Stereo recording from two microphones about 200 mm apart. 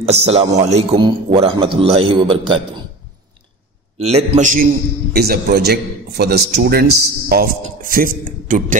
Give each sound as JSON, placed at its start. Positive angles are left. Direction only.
{"t": 0.0, "sound": "a man's voice", "side_deg": -30}
{"t": 4.0, "sound": "a man's voice", "side_deg": -35}
{"t": 5.1, "sound": "a man's voice", "side_deg": -50}